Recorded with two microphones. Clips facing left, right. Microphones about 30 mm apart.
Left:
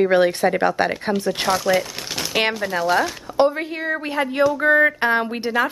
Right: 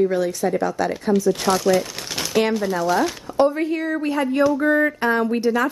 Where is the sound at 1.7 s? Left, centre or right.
Centre.